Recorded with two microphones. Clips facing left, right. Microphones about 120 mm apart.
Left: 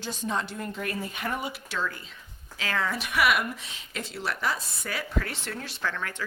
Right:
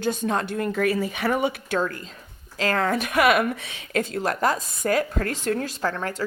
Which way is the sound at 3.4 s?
60° right (ahead or behind).